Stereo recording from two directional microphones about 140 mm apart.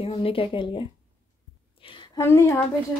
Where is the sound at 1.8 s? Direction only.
35° left (ahead or behind).